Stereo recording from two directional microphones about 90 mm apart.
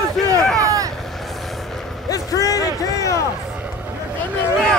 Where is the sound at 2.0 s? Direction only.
40° left (ahead or behind).